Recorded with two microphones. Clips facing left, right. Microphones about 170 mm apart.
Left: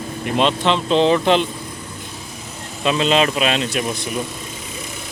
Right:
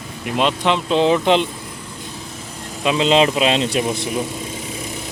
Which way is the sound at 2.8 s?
15° right (ahead or behind).